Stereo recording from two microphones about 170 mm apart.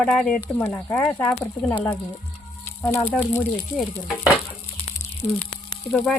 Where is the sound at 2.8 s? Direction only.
10° left (ahead or behind).